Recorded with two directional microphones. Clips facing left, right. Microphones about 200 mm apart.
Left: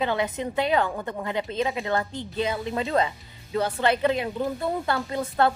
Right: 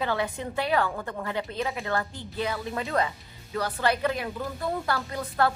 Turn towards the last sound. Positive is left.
turn(degrees=25)  # may be behind; listen again after turning